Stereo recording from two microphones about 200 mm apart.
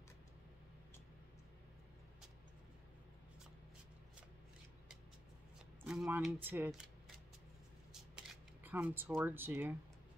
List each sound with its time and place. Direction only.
5.9 s speech: 5° right (ahead or behind)
7.9 s camera: 5° right (ahead or behind)